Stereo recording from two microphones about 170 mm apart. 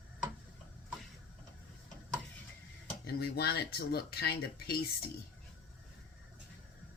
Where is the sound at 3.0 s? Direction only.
70° left (ahead or behind).